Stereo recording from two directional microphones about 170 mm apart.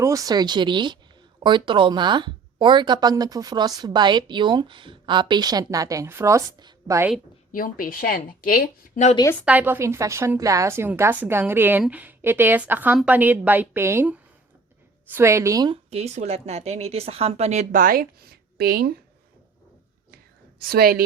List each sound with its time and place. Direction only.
0.0 s speech: 20° right (ahead or behind)
7.5 s speech: 55° left (ahead or behind)
9.4 s a woman's voice: 10° right (ahead or behind)
15.9 s speech: 40° right (ahead or behind); by 18.9 s 65° right (ahead or behind)
20.6 s a woman's voice: 65° right (ahead or behind)